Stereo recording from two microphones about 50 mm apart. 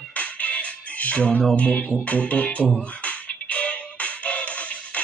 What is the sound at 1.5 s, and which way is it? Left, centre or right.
Speech, left.